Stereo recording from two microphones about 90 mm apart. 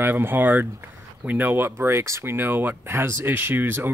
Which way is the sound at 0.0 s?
25° right (ahead or behind).